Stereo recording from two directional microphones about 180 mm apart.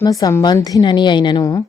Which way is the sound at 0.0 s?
20° left (ahead or behind).